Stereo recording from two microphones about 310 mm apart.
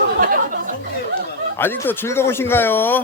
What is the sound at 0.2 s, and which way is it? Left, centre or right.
Chatter, right.